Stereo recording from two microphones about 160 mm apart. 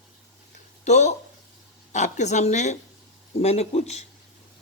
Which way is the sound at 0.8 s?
45° left (ahead or behind).